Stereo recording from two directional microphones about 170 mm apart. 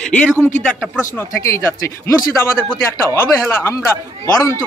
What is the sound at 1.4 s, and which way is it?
Speech, 15° left (ahead or behind).